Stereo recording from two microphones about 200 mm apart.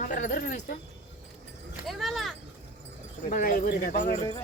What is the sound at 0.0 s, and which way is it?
Speech, 40° left (ahead or behind).